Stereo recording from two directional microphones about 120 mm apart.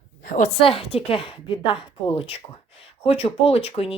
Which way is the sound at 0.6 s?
50° left (ahead or behind).